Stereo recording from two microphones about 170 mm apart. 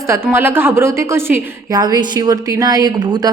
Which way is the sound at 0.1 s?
15° right (ahead or behind).